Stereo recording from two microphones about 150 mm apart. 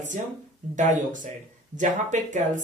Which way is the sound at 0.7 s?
55° right (ahead or behind).